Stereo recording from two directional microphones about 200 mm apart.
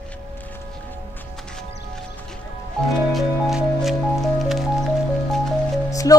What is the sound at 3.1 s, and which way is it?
Music, centre (ahead or behind).